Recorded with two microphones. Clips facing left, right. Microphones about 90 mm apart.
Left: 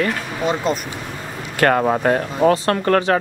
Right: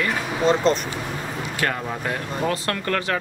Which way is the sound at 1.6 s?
60° left (ahead or behind).